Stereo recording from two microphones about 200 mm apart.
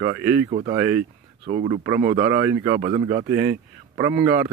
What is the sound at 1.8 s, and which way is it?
Speech, 15° right (ahead or behind).